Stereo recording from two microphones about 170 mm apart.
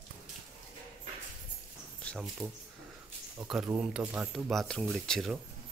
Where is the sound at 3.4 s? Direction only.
5° right (ahead or behind).